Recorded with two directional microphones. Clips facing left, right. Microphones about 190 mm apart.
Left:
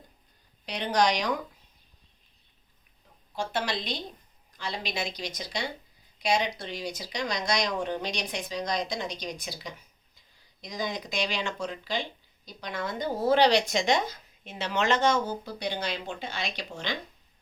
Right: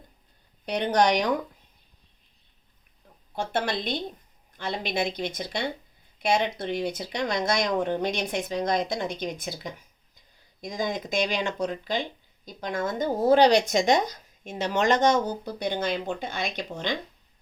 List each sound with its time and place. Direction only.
0.6 s a woman's voice: 55° right (ahead or behind)
3.5 s a woman's voice: 55° right (ahead or behind)
15.0 s speech: 15° right (ahead or behind)
15.5 s speech: 50° right (ahead or behind)